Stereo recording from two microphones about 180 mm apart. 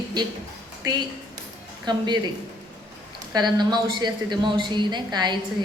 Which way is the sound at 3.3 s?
25° right (ahead or behind).